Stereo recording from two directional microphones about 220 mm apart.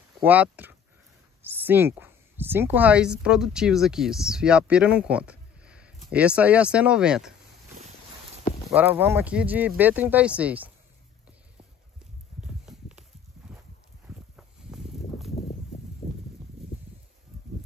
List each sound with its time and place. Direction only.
0.2 s speech: 10° right (ahead or behind)
8.6 s speech: 10° right (ahead or behind)
12.4 s horse: 5° right (ahead or behind)
14.0 s a sound: 5° right (ahead or behind)